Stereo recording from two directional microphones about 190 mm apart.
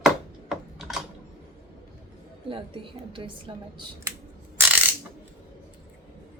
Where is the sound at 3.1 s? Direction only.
25° right (ahead or behind).